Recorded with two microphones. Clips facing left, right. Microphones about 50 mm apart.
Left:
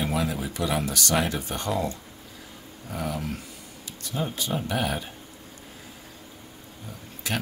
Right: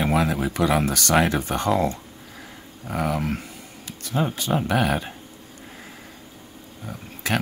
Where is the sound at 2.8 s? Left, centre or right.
Right.